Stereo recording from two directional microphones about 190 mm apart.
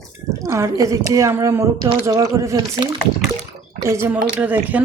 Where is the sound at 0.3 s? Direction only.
15° right (ahead or behind).